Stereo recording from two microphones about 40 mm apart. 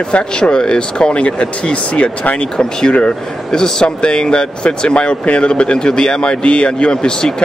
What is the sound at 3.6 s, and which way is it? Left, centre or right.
A man's voice, centre.